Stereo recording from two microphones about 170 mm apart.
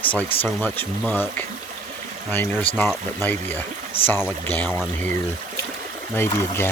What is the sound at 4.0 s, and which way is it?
Speech, 35° left (ahead or behind).